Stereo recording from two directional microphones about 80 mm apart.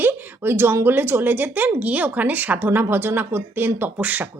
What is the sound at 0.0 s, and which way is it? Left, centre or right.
A woman's voice, right.